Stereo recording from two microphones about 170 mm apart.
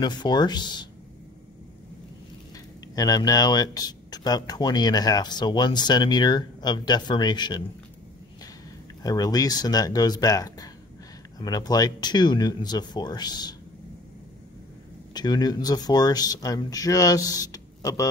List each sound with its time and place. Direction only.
0.0 s speech: 25° left (ahead or behind)
2.5 s speech: 20° left (ahead or behind)
9.0 s speech: 20° left (ahead or behind)
15.1 s speech: 25° left (ahead or behind)